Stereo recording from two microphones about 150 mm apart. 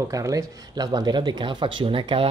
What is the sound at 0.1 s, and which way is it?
Speech, 20° right (ahead or behind).